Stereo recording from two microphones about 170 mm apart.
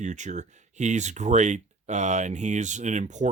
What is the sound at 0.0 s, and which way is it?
Speech, 45° right (ahead or behind).